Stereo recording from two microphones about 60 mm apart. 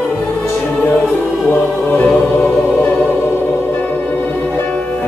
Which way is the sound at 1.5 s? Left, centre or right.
Left.